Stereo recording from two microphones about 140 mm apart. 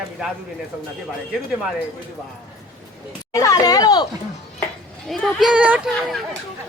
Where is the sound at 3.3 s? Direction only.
25° left (ahead or behind).